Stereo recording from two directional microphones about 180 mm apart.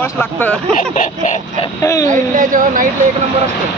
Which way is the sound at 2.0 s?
45° right (ahead or behind).